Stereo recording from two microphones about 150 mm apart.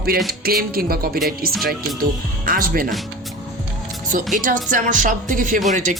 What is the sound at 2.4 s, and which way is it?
Speech, 70° right (ahead or behind).